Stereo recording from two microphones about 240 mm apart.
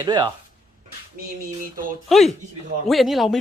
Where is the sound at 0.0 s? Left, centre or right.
Centre.